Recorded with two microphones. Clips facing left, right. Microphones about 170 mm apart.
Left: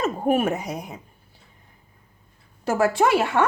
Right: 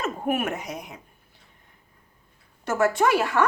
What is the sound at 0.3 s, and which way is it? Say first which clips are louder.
Speech: left 5 dB; 30° left (ahead or behind).